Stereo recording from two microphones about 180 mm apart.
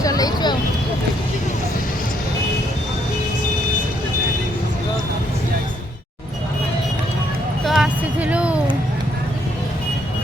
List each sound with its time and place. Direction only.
0.0 s vehicle: 20° left (ahead or behind)
7.6 s music: centre (ahead or behind)